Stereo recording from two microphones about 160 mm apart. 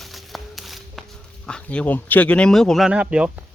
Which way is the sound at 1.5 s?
5° left (ahead or behind).